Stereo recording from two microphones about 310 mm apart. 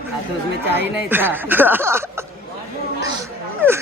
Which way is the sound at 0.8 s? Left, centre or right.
Centre.